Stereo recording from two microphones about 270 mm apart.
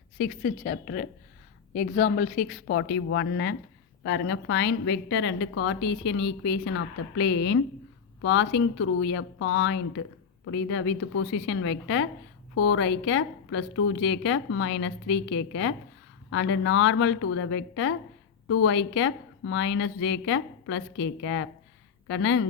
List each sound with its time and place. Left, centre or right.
0.2 s a woman's voice: left
2.6 s a woman's voice: left